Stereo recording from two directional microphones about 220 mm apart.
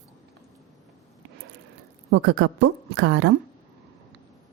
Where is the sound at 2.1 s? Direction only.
55° right (ahead or behind).